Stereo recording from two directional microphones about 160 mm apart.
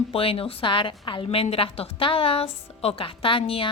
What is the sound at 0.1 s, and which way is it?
A woman's voice, 35° left (ahead or behind).